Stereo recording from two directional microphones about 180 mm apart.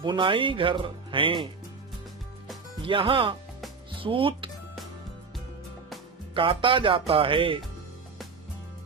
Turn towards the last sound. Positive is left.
turn(degrees=-30)  # may be behind; listen again after turning